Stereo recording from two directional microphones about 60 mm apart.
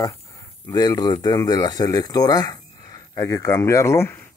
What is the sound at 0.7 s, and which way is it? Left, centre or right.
Speech, left.